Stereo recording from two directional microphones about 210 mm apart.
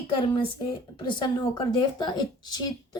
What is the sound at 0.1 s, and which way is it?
Speech, 25° left (ahead or behind).